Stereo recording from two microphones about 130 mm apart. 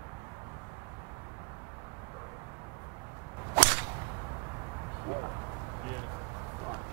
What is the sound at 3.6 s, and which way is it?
Whip, 15° right (ahead or behind).